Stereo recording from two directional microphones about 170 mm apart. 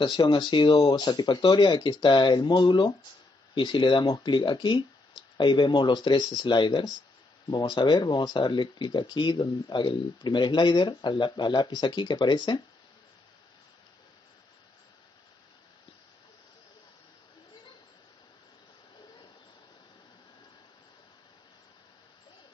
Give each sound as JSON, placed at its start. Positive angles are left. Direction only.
{"t": 0.0, "sound": "speech", "side_deg": 30}